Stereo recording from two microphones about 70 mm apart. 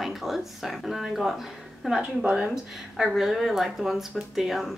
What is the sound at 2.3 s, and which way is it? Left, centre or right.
Speech, centre.